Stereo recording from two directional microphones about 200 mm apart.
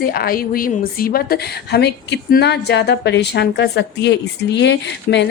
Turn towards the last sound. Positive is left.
turn(degrees=60)  # may be behind; listen again after turning